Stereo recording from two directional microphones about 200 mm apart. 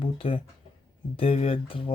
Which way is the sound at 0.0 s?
25° left (ahead or behind).